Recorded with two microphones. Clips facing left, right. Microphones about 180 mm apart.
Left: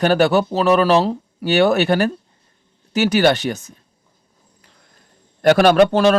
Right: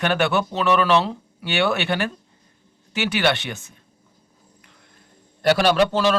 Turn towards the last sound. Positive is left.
turn(degrees=55)  # may be behind; listen again after turning